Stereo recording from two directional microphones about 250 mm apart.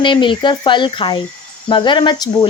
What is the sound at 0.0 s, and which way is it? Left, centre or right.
Speech, centre.